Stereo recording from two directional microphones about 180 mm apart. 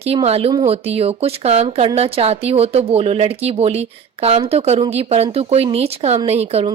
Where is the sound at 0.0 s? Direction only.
35° right (ahead or behind).